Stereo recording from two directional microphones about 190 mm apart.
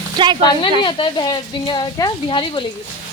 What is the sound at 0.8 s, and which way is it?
Speech, 25° left (ahead or behind).